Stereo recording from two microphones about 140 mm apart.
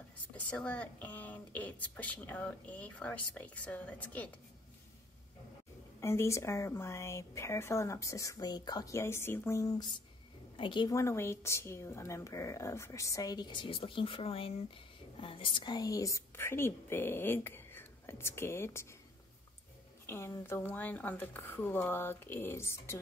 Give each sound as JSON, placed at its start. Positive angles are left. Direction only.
{"t": 0.5, "sound": "a woman's voice", "side_deg": 10}
{"t": 5.9, "sound": "speech", "side_deg": 20}
{"t": 10.6, "sound": "a woman's voice", "side_deg": 35}
{"t": 11.0, "sound": "a woman's voice", "side_deg": 20}
{"t": 20.1, "sound": "a woman's voice", "side_deg": 15}